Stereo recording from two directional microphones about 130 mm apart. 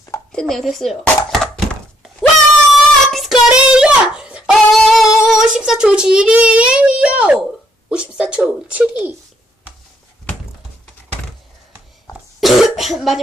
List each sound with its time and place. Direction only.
0.3 s speech: 5° left (ahead or behind)
2.7 s child singing: centre (ahead or behind)
5.3 s a child's voice: 5° right (ahead or behind)
12.4 s cough: centre (ahead or behind)